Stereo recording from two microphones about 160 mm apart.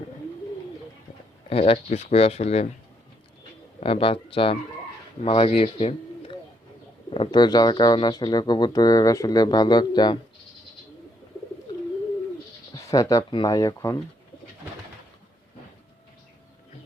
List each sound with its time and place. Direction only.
1.5 s speech: 35° left (ahead or behind)
3.8 s speech: 40° left (ahead or behind)
12.7 s speech: 20° left (ahead or behind)